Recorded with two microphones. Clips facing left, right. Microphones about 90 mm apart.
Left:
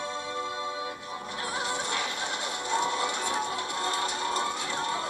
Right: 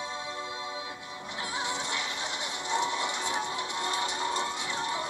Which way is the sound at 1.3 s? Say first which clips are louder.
Left 1 dB; 20° right (ahead or behind).